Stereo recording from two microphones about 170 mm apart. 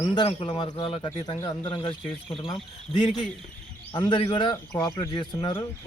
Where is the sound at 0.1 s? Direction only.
30° left (ahead or behind).